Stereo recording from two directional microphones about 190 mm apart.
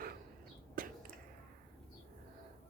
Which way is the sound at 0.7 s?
50° right (ahead or behind).